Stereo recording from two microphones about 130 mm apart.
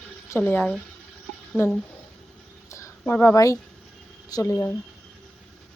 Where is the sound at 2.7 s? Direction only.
20° left (ahead or behind).